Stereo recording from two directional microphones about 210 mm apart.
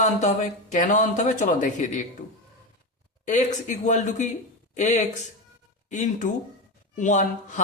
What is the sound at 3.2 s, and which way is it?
Speech, 35° left (ahead or behind).